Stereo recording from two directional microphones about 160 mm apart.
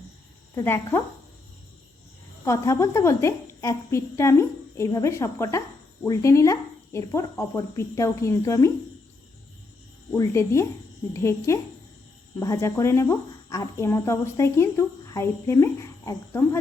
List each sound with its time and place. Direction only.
0.5 s speech: 15° left (ahead or behind)
2.4 s a woman's voice: 20° left (ahead or behind)
10.2 s speech: 15° left (ahead or behind)